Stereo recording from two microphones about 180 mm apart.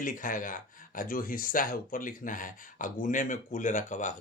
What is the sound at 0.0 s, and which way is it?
Speech, 50° left (ahead or behind).